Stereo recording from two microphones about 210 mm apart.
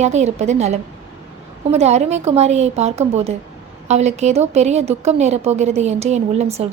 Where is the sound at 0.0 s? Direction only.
35° right (ahead or behind).